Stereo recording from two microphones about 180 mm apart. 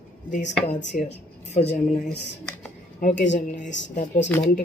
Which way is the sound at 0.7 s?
40° left (ahead or behind).